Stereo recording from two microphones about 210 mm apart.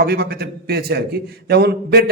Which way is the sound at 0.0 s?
50° right (ahead or behind).